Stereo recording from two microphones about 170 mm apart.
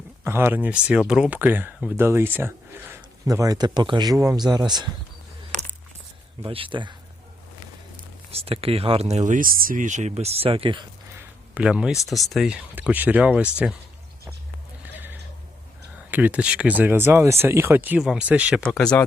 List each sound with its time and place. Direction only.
0.3 s speech: 15° right (ahead or behind)
6.4 s speech: 30° right (ahead or behind)
8.3 s speech: 35° right (ahead or behind)
11.5 s speech: 5° right (ahead or behind)
14.9 s a sound: 10° right (ahead or behind)
16.1 s speech: 10° right (ahead or behind)
18.7 s speech: 5° left (ahead or behind)